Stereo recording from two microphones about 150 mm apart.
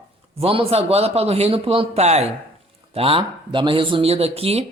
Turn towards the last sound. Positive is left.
turn(degrees=-40)  # may be behind; listen again after turning